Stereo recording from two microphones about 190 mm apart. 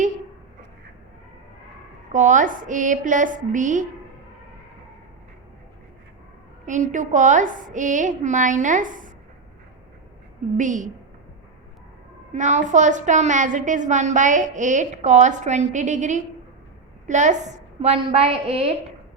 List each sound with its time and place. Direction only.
2.1 s a woman's voice: 40° right (ahead or behind)
6.7 s a woman's voice: 40° right (ahead or behind)
10.6 s a woman's voice: 40° right (ahead or behind)
12.3 s a woman's voice: 40° right (ahead or behind)